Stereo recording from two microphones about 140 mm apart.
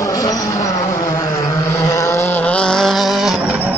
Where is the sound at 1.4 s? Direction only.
20° left (ahead or behind).